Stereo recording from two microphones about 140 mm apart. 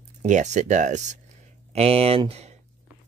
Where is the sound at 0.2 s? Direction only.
55° right (ahead or behind).